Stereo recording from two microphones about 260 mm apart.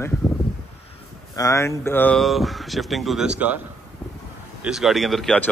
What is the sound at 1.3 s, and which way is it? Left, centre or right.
A man's voice, centre.